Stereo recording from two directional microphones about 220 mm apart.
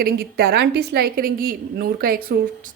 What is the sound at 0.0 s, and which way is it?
A woman's voice, 45° right (ahead or behind).